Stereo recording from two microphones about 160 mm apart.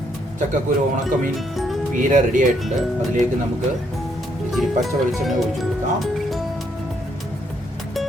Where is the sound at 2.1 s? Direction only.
55° right (ahead or behind).